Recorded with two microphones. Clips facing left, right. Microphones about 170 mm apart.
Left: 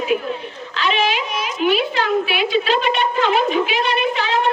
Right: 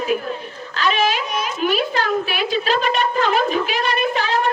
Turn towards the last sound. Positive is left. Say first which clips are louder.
# even
turn(degrees=-40)  # may be behind; listen again after turning